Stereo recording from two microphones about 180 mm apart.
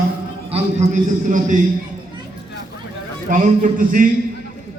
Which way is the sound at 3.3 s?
45° right (ahead or behind).